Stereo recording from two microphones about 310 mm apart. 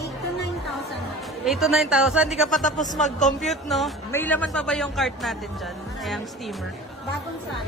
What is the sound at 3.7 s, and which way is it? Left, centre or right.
Speech, centre.